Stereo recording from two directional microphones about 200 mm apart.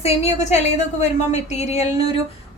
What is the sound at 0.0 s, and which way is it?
A woman's voice, 30° left (ahead or behind).